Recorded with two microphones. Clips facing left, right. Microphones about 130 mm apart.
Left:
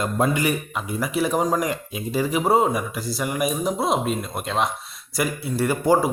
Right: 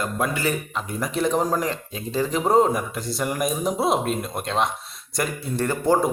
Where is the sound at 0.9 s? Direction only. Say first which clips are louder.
Even; 5° left (ahead or behind).